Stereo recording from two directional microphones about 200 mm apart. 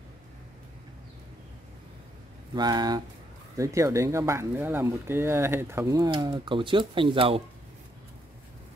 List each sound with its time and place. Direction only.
2.5 s speech: 20° right (ahead or behind)